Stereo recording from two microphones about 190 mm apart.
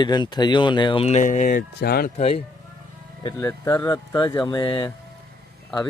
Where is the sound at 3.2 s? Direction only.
20° left (ahead or behind).